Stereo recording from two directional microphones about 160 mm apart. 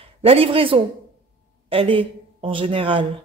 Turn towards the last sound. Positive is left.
turn(degrees=-35)  # may be behind; listen again after turning